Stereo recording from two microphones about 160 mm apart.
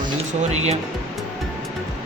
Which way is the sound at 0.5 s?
45° right (ahead or behind).